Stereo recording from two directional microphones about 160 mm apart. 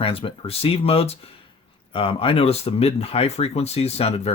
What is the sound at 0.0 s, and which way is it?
Speech, 35° left (ahead or behind).